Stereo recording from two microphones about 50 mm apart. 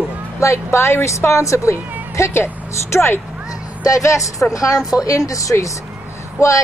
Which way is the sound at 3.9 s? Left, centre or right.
Left.